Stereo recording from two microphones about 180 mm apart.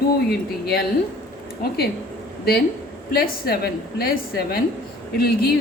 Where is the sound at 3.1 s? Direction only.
55° left (ahead or behind).